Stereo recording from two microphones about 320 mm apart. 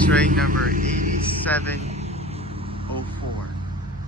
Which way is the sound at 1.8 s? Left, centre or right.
Centre.